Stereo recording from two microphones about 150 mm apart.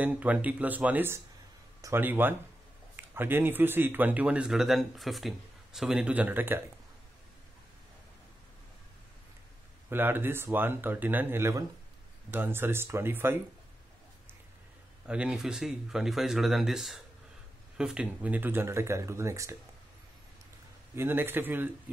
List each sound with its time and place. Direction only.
0.0 s a man's voice: 10° right (ahead or behind)
9.8 s a man's voice: 15° right (ahead or behind)
15.0 s a man's voice: 5° right (ahead or behind)
20.9 s a man's voice: 15° right (ahead or behind)